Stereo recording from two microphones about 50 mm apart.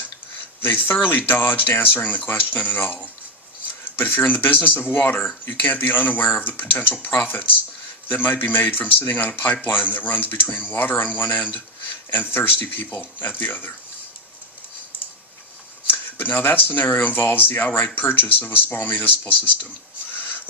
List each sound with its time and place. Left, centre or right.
0.6 s speech: left
4.3 s speech: left
15.9 s speech: left